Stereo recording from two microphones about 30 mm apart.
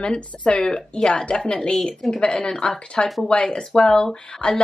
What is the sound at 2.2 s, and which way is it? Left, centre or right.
Speech, left.